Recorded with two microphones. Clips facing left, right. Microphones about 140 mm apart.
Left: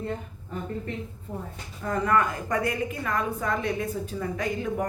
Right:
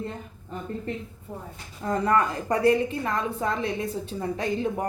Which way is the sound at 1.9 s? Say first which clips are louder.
Right 1 dB; 30° right (ahead or behind).